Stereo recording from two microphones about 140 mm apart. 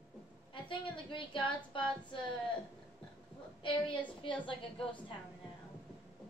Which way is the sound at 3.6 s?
35° left (ahead or behind).